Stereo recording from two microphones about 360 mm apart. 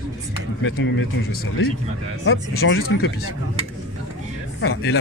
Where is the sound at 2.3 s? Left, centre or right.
Left.